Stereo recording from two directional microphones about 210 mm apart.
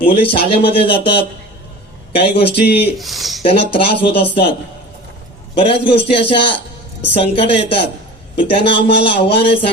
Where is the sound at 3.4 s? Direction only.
30° left (ahead or behind).